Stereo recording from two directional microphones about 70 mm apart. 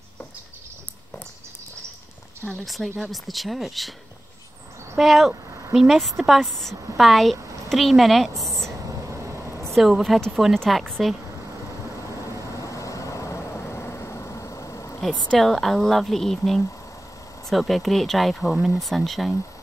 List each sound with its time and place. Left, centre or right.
2.4 s a woman's voice: centre
4.9 s a woman's voice: centre
9.1 s vehicle: right
9.8 s a woman's voice: centre
12.5 s vehicle: left
15.3 s a woman's voice: centre
17.5 s a woman's voice: centre